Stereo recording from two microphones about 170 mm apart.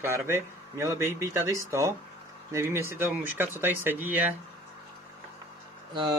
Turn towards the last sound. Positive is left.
turn(degrees=-25)  # may be behind; listen again after turning